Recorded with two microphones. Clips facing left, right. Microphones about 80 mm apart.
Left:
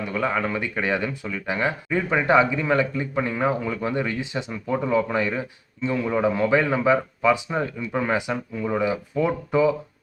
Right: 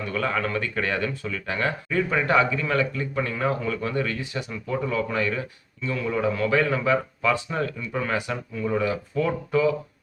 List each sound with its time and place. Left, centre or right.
0.0 s speech: centre